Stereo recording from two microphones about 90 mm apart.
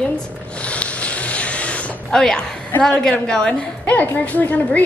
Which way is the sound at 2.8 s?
10° left (ahead or behind).